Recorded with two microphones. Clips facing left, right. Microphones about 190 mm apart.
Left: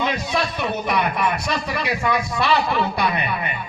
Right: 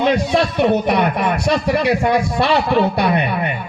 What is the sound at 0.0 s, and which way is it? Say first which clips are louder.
A man's voice: right 7 dB; 60° right (ahead or behind).